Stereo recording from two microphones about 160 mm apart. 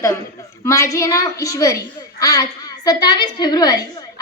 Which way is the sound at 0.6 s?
20° left (ahead or behind).